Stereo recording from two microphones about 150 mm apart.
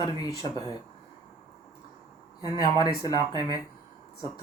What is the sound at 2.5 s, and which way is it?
Speech, 30° left (ahead or behind).